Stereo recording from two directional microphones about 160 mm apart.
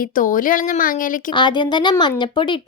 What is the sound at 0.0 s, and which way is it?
Speech, 60° left (ahead or behind).